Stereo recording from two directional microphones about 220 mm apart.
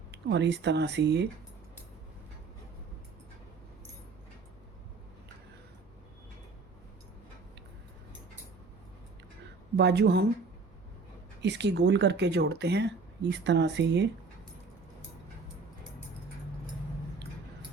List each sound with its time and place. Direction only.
0.3 s speech: 50° right (ahead or behind)
9.7 s speech: 50° right (ahead or behind)
11.4 s speech: 50° right (ahead or behind)